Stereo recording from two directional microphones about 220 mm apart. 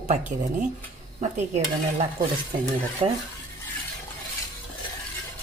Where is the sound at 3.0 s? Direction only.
25° right (ahead or behind).